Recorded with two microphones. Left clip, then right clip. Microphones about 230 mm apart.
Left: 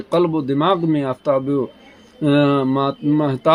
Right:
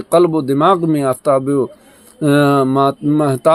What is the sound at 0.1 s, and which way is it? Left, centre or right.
Speech, right.